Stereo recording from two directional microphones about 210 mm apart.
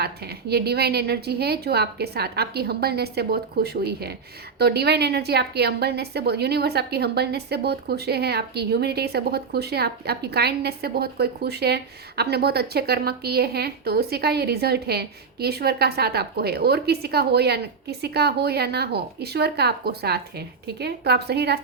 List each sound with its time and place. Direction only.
0.0 s speech: 50° right (ahead or behind)